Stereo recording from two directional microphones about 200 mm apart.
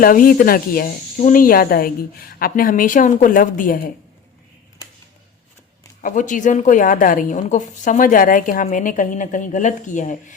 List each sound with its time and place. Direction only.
0.0 s speech: 45° left (ahead or behind)
6.0 s a woman's voice: 40° left (ahead or behind)